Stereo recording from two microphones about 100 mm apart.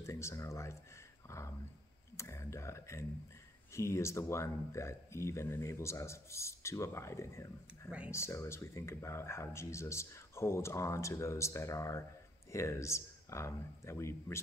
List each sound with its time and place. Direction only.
0.0 s speech: 30° left (ahead or behind)